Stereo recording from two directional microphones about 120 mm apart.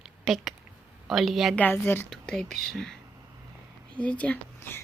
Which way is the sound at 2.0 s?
5° left (ahead or behind).